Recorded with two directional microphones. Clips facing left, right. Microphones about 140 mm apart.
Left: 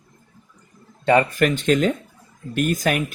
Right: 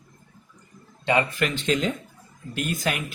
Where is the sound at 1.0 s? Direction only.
45° left (ahead or behind).